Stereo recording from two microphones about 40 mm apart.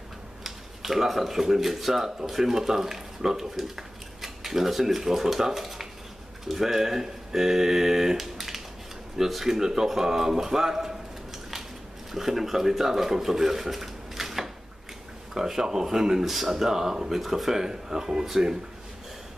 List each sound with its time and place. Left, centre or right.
0.4 s speech: centre
12.1 s speech: centre